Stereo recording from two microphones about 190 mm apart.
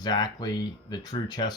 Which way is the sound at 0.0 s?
20° left (ahead or behind).